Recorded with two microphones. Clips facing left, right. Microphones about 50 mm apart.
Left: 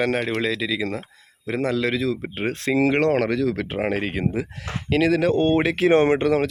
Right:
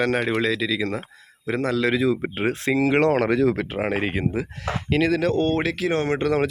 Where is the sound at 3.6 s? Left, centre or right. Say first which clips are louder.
Even; centre.